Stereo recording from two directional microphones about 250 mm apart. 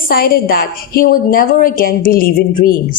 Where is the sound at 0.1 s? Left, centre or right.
Left.